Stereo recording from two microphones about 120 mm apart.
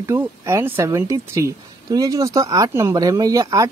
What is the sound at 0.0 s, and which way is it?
Speech, 25° right (ahead or behind).